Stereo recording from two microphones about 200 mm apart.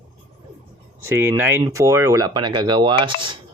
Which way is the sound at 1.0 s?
10° right (ahead or behind).